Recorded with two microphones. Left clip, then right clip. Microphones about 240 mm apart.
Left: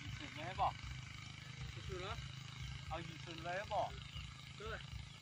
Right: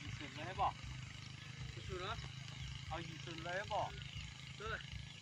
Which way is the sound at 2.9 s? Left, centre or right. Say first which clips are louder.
Even; left.